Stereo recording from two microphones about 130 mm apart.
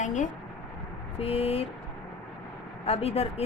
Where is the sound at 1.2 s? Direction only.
50° left (ahead or behind).